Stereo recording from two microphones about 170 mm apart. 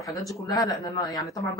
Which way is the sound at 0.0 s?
20° left (ahead or behind).